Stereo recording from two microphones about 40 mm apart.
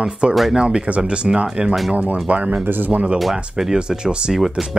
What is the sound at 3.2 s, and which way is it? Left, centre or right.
Speech, centre.